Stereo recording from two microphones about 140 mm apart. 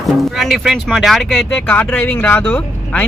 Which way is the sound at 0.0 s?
Centre (ahead or behind).